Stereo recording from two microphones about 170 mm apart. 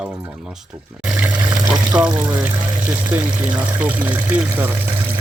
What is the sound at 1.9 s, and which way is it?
Speech, 5° right (ahead or behind).